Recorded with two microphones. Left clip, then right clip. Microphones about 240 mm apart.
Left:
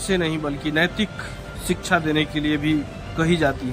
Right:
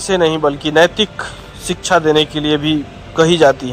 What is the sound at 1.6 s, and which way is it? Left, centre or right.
A man's voice, centre.